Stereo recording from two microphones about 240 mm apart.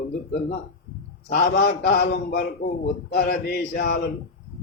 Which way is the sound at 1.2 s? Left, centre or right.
Left.